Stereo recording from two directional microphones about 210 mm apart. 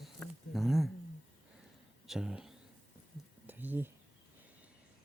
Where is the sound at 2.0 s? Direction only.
Centre (ahead or behind).